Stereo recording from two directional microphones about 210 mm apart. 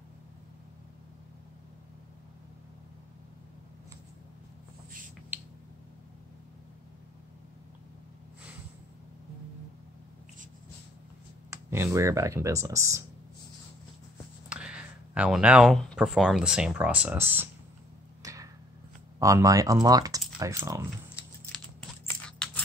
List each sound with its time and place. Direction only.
11.5 s speech: 10° right (ahead or behind)
14.5 s speech: 5° right (ahead or behind)
18.2 s a sound: 15° right (ahead or behind)
19.1 s speech: 15° right (ahead or behind)